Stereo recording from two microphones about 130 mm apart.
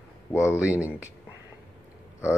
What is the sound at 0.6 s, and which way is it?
Speech, 10° right (ahead or behind).